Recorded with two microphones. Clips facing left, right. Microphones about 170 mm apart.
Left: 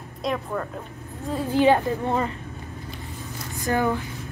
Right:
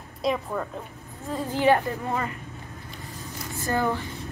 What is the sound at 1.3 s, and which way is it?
Speech, 15° left (ahead or behind).